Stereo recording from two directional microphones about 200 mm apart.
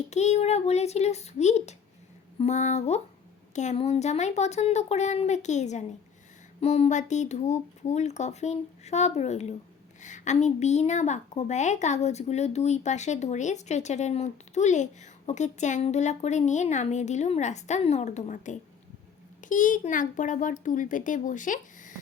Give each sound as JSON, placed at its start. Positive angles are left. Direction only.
{"t": 0.1, "sound": "a woman's voice", "side_deg": 35}